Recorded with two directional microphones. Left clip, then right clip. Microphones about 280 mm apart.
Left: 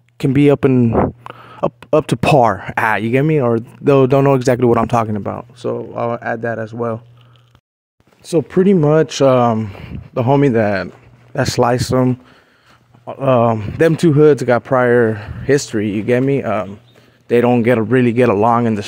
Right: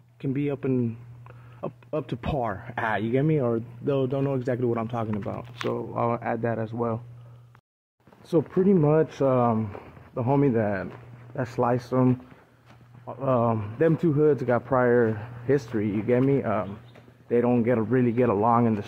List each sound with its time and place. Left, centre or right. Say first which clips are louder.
0.2 s speech: left 17 dB; left
8.2 s speech: left 8 dB; left
8.7 s speech: left 9 dB; left